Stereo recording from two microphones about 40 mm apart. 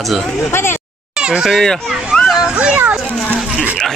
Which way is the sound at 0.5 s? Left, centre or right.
Left.